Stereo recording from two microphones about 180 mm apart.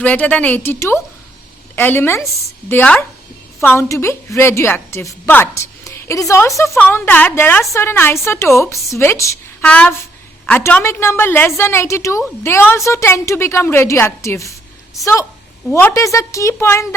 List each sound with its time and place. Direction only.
0.0 s a woman's voice: 10° left (ahead or behind)